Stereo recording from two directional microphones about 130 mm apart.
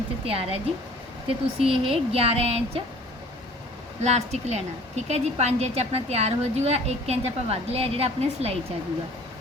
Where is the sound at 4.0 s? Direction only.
55° right (ahead or behind).